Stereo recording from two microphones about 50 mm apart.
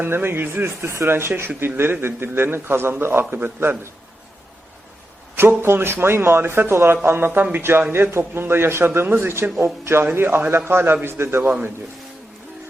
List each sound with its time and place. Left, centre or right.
0.0 s a man's voice: right
5.4 s a man's voice: right